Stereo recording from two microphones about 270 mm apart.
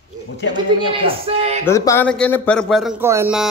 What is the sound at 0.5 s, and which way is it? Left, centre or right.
A man's voice, centre.